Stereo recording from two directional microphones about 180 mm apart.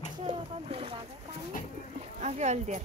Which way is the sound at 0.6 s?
35° right (ahead or behind).